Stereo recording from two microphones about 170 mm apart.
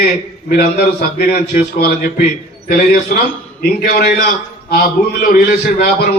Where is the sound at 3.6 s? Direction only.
65° left (ahead or behind).